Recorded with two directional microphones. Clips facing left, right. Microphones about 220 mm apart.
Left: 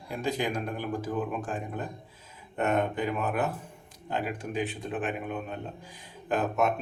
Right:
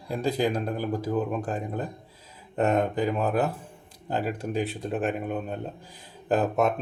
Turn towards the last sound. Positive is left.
turn(degrees=-35)  # may be behind; listen again after turning